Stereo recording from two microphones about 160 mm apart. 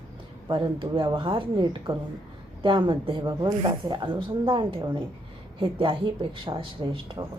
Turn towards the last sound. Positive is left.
turn(degrees=-30)  # may be behind; listen again after turning